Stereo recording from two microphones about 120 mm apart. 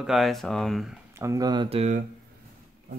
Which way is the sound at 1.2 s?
30° right (ahead or behind).